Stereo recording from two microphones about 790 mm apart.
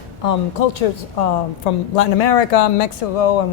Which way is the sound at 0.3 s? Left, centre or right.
Left.